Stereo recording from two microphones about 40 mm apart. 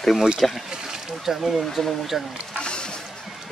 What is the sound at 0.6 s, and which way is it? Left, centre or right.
Speech, centre.